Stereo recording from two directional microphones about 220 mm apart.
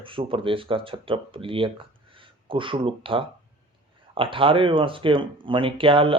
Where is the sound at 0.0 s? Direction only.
25° right (ahead or behind).